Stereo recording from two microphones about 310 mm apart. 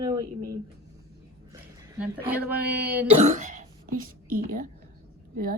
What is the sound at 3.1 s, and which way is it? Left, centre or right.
A woman's voice, right.